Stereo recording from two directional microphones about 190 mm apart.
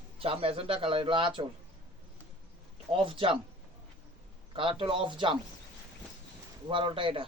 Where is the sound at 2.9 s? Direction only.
30° right (ahead or behind).